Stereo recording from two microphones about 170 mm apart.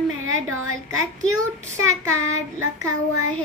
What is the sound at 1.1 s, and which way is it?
Speech, 45° right (ahead or behind).